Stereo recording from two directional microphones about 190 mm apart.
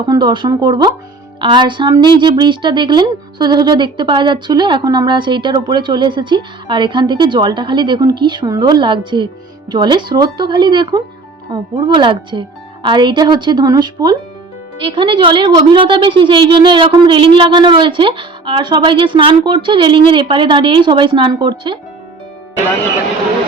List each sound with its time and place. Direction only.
0.1 s speech: 25° right (ahead or behind)